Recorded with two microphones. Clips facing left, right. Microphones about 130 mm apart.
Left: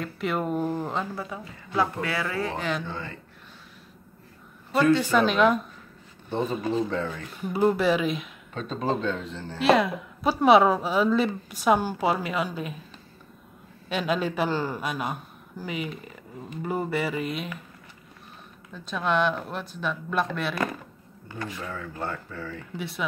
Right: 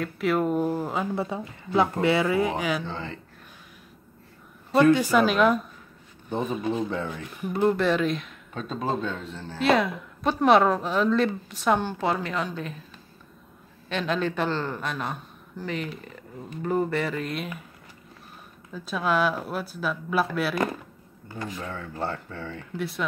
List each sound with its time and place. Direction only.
0.0 s speech: centre (ahead or behind)
1.1 s speech: 25° right (ahead or behind); by 2.8 s 10° right (ahead or behind)
2.8 s speech: 25° right (ahead or behind)
4.9 s speech: 10° right (ahead or behind)
6.9 s speech: 15° right (ahead or behind)
7.5 s speech: 5° left (ahead or behind)
13.8 s speech: 5° left (ahead or behind)
18.7 s speech: 5° right (ahead or behind)
21.4 s speech: 25° right (ahead or behind)
22.8 s speech: centre (ahead or behind)